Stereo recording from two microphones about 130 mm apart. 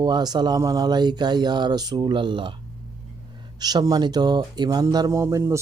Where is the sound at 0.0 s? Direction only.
30° right (ahead or behind).